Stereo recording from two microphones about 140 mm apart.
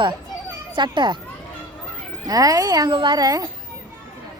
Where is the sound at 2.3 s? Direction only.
25° right (ahead or behind).